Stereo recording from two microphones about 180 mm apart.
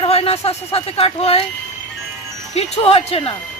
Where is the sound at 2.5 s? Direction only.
35° left (ahead or behind).